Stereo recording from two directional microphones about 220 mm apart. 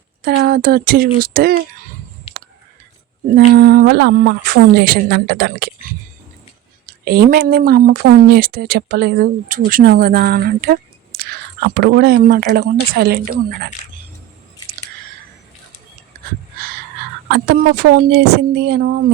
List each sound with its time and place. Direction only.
0.3 s speech: 45° right (ahead or behind)
3.3 s speech: 45° right (ahead or behind)
6.8 s speech: 45° right (ahead or behind)
16.1 s a sound: 45° right (ahead or behind)
17.3 s speech: 50° right (ahead or behind)